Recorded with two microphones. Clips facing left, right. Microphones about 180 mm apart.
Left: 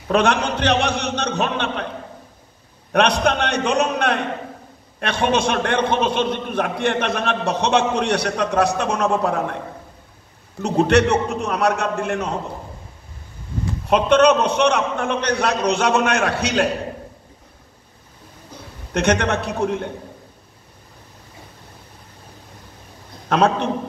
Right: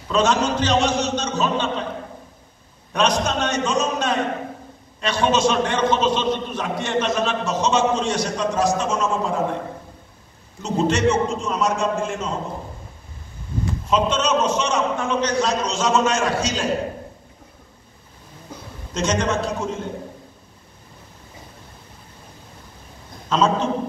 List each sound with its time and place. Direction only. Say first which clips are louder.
0.1 s a man's voice: left 1 dB; 60° left (ahead or behind)
2.9 s a man's voice: left 3 dB; 60° left (ahead or behind)
10.6 s a man's voice: left 4 dB; 65° left (ahead or behind)
13.8 s a man's voice: left 7 dB; 60° left (ahead or behind)
18.9 s a man's voice: left 3 dB; 65° left (ahead or behind)
23.2 s a man's voice: left 2 dB; 60° left (ahead or behind)